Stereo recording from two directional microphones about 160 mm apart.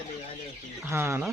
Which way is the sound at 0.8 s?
15° right (ahead or behind).